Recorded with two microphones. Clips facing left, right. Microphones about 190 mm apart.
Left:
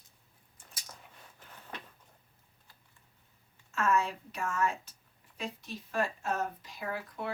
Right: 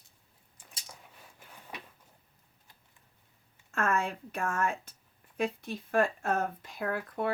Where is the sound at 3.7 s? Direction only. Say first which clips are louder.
Left 1 dB; 55° right (ahead or behind).